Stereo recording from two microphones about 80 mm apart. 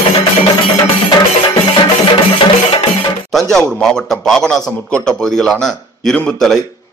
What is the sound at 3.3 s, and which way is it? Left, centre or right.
A man's voice, centre.